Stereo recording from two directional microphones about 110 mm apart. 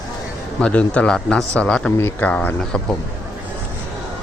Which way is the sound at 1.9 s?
15° left (ahead or behind).